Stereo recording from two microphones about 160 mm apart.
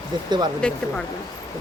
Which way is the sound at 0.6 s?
5° left (ahead or behind).